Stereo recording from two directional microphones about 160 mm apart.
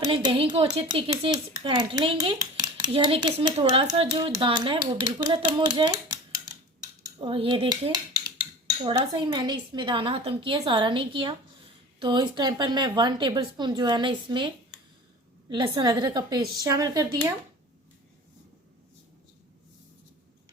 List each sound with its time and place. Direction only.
0.0 s speech: 30° right (ahead or behind)
2.4 s dishes: 25° right (ahead or behind)
2.9 s a woman's voice: 30° right (ahead or behind)
7.2 s a woman's voice: 30° right (ahead or behind)